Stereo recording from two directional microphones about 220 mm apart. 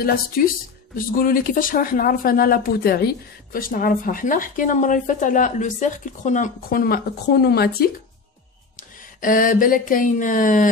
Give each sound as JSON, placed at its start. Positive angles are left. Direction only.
{"t": 0.4, "sound": "speech", "side_deg": 45}